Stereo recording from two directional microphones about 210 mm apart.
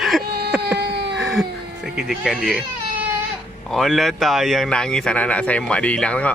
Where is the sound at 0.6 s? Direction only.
50° right (ahead or behind).